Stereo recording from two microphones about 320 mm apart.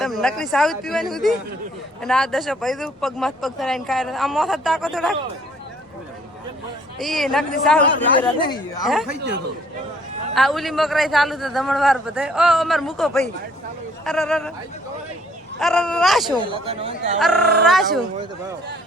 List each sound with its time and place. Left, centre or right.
0.0 s speech: centre
7.0 s speech: centre
10.3 s speech: centre
15.5 s speech: centre
16.5 s speech: centre
17.2 s speech: centre